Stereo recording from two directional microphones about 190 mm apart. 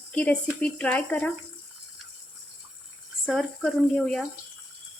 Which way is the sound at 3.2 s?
Centre (ahead or behind).